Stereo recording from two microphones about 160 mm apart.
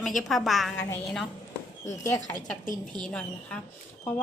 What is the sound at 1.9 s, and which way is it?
Speech, 20° left (ahead or behind).